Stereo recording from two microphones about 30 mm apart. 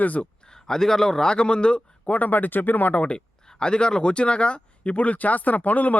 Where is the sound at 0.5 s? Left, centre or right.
Centre.